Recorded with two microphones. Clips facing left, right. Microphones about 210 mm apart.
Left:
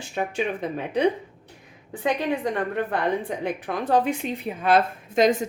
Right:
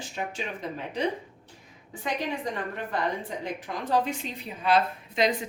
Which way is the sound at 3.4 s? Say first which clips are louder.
Left 6 dB; 60° left (ahead or behind).